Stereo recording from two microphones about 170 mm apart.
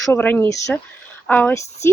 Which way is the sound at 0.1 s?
10° left (ahead or behind).